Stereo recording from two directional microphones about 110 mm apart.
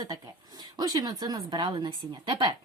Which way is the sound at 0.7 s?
35° right (ahead or behind).